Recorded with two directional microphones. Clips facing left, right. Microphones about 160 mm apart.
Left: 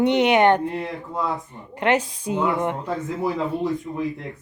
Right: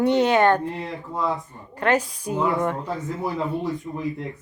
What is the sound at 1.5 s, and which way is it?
A woman's voice, 20° left (ahead or behind).